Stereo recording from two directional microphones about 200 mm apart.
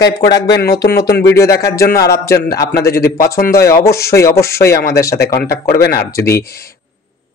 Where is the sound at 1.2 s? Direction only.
15° left (ahead or behind).